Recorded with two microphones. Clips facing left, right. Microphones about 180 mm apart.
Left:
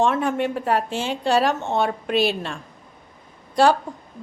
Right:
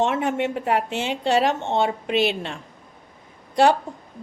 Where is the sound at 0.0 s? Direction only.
20° right (ahead or behind).